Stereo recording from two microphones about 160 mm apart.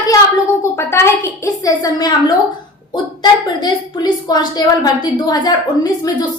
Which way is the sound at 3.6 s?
25° left (ahead or behind).